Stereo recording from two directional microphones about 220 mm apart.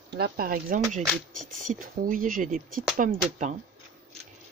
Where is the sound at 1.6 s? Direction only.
35° right (ahead or behind).